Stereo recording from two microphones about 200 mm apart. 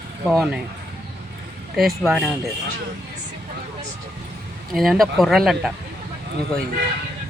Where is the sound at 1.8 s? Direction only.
Centre (ahead or behind).